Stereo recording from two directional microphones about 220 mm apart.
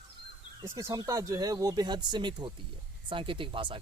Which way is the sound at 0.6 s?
15° right (ahead or behind).